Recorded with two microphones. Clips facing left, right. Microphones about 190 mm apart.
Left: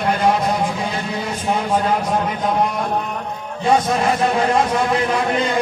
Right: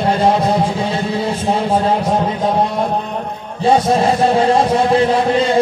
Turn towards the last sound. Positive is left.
turn(degrees=-30)  # may be behind; listen again after turning